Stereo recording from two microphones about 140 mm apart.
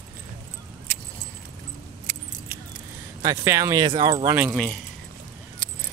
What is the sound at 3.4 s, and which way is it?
Speech, 20° right (ahead or behind).